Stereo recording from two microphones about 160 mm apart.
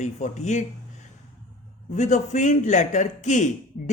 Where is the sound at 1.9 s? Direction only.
45° left (ahead or behind).